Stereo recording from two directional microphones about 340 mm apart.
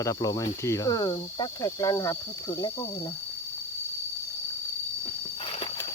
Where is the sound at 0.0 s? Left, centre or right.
Centre.